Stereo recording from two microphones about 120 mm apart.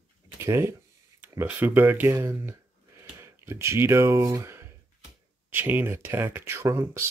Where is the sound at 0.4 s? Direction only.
20° right (ahead or behind).